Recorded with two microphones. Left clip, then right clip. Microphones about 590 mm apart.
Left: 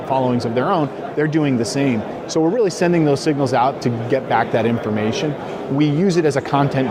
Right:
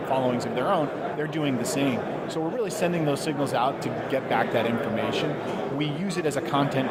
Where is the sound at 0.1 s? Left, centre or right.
Left.